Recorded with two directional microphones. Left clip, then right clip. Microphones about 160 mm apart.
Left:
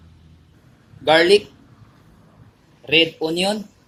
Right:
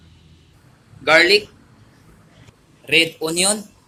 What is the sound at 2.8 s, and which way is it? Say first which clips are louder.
Speech: even; 40° left (ahead or behind).